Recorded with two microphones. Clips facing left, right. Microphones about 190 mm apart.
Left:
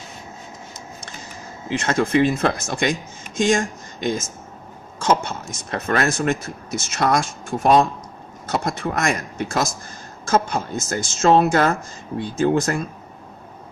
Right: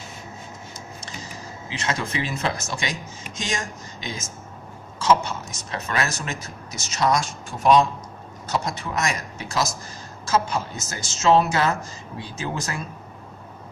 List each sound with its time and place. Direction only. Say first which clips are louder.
1.7 s speech: left 9 dB; 50° left (ahead or behind)